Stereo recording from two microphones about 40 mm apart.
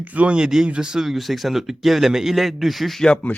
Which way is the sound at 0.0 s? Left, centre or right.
Right.